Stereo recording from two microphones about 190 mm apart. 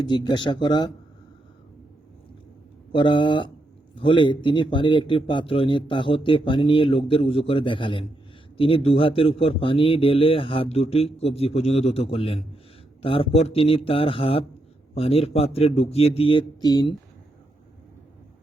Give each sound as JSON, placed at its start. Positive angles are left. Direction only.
{"t": 0.1, "sound": "a man's voice", "side_deg": 25}
{"t": 2.9, "sound": "a man's voice", "side_deg": 25}